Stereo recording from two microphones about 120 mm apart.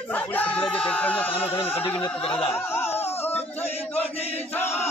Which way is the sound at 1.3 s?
50° left (ahead or behind).